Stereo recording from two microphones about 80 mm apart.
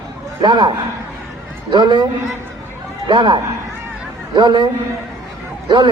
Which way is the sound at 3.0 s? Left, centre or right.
Right.